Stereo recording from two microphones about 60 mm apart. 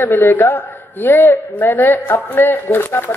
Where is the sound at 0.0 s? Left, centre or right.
Left.